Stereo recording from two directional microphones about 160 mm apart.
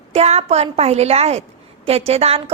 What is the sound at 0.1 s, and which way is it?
A woman's voice, 40° right (ahead or behind).